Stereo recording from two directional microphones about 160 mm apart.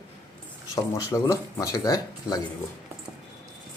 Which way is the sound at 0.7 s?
20° left (ahead or behind).